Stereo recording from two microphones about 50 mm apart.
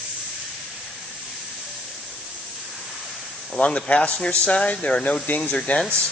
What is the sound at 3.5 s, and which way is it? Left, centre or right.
Speech, left.